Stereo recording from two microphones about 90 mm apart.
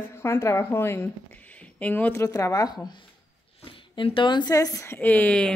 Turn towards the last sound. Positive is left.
turn(degrees=15)  # may be behind; listen again after turning